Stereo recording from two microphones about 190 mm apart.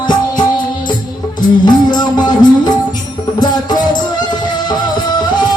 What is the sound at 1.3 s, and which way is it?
Music, 25° left (ahead or behind).